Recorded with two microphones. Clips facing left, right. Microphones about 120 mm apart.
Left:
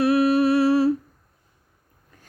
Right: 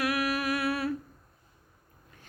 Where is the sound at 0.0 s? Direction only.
30° left (ahead or behind).